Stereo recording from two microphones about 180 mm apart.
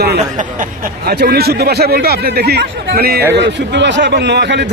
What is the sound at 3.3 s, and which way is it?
A man's voice, 75° right (ahead or behind).